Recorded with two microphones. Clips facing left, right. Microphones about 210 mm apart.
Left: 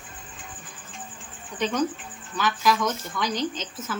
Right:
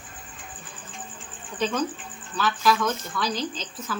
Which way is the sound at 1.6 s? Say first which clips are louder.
Left 1 dB; 15° left (ahead or behind).